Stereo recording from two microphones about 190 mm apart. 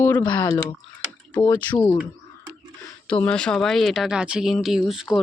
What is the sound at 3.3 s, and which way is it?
Speech, 5° left (ahead or behind).